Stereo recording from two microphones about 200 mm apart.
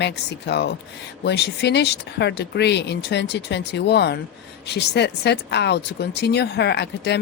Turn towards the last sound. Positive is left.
turn(degrees=55)  # may be behind; listen again after turning